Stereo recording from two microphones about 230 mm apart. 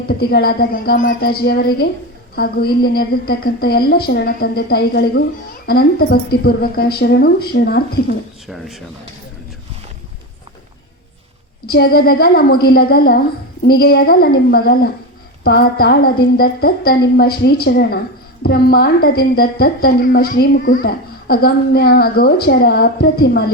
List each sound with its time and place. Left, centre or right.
0.1 s a woman's voice: left
8.4 s speech: centre
11.7 s a woman's voice: left